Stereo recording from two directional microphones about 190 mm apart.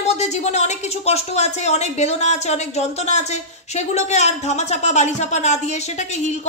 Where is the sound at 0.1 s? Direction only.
35° left (ahead or behind).